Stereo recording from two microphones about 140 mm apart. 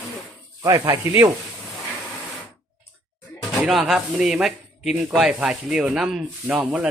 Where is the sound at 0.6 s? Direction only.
25° right (ahead or behind).